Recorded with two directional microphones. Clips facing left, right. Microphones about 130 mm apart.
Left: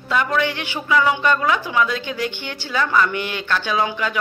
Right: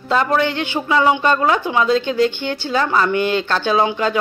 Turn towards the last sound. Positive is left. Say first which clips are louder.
# right 5 dB
turn(degrees=-30)  # may be behind; listen again after turning